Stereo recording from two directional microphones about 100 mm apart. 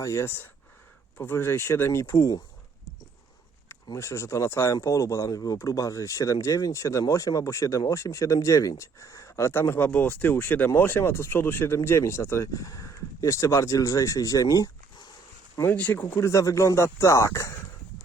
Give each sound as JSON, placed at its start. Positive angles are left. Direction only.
{"t": 0.0, "sound": "speech", "side_deg": 30}
{"t": 3.9, "sound": "speech", "side_deg": 30}
{"t": 15.7, "sound": "speech", "side_deg": 15}